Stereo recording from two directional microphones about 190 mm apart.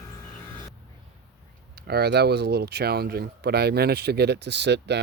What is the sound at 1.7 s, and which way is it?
Speech, 55° right (ahead or behind).